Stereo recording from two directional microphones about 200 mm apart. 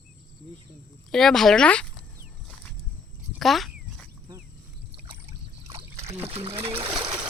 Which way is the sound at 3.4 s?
Centre (ahead or behind).